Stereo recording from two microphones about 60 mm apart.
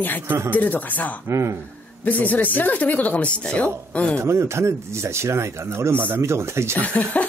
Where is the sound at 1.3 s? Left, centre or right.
Right.